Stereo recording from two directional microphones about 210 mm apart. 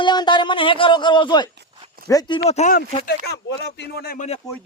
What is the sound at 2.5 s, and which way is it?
Speech, 35° left (ahead or behind).